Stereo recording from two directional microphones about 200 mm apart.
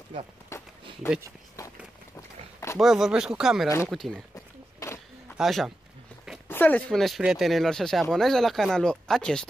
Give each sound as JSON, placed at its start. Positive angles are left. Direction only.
{"t": 0.5, "sound": "a sound", "side_deg": 15}
{"t": 1.6, "sound": "run", "side_deg": 15}
{"t": 2.8, "sound": "speech", "side_deg": 0}
{"t": 3.6, "sound": "speech", "side_deg": 15}
{"t": 3.9, "sound": "speech", "side_deg": 0}
{"t": 4.7, "sound": "a sound", "side_deg": 15}
{"t": 5.4, "sound": "speech", "side_deg": 0}